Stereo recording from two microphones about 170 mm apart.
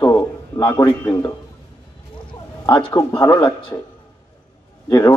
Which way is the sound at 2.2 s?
30° left (ahead or behind).